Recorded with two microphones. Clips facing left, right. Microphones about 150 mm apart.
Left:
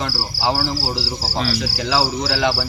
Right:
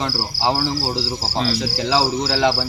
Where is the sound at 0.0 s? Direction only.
25° right (ahead or behind).